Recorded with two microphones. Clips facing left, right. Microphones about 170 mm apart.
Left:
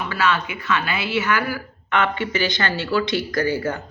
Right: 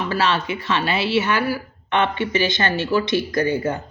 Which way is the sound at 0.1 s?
30° right (ahead or behind).